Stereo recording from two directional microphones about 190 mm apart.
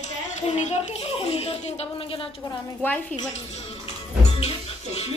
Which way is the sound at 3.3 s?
35° left (ahead or behind).